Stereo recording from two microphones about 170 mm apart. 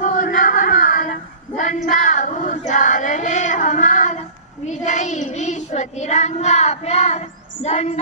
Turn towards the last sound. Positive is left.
turn(degrees=40)  # may be behind; listen again after turning